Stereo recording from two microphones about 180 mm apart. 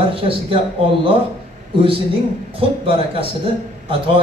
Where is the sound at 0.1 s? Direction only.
30° right (ahead or behind).